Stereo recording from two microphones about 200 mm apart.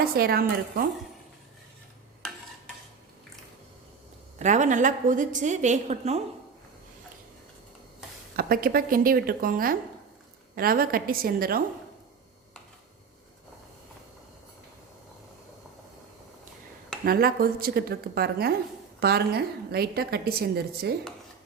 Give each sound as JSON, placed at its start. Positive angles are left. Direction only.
{"t": 0.0, "sound": "a woman's voice", "side_deg": -50}
{"t": 4.4, "sound": "a woman's voice", "side_deg": -35}
{"t": 8.4, "sound": "a woman's voice", "side_deg": -45}
{"t": 17.1, "sound": "a woman's voice", "side_deg": -50}